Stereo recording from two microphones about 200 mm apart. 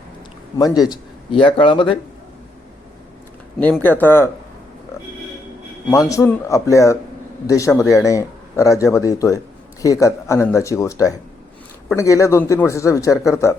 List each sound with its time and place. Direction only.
0.6 s speech: 20° left (ahead or behind)
3.8 s speech: 10° left (ahead or behind)
5.9 s speech: 15° left (ahead or behind)